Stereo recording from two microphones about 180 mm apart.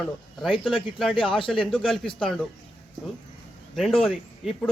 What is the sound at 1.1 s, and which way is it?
Speech, 30° left (ahead or behind).